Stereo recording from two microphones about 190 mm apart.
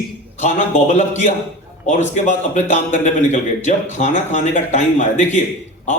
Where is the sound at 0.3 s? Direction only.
40° left (ahead or behind).